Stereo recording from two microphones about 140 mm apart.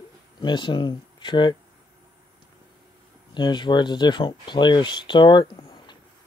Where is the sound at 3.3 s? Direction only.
35° left (ahead or behind).